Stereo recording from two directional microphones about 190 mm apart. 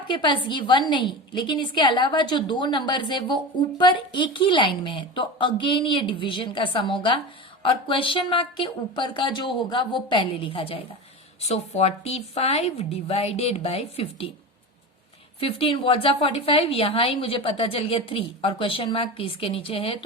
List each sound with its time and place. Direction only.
0.1 s a woman's voice: 25° left (ahead or behind)
15.4 s a woman's voice: 30° left (ahead or behind)